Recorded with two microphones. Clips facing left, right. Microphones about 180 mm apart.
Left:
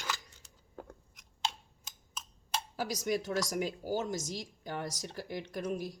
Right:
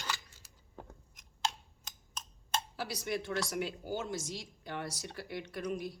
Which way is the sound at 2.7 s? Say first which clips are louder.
Left 7 dB; 45° left (ahead or behind).